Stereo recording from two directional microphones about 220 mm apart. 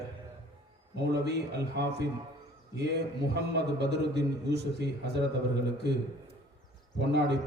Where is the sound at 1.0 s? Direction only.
50° right (ahead or behind).